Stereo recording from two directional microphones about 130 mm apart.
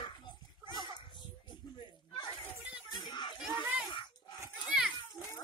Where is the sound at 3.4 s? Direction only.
5° right (ahead or behind).